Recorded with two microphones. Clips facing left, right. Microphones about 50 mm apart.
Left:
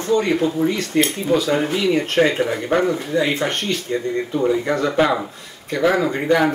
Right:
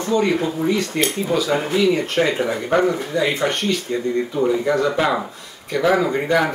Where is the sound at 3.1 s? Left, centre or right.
Left.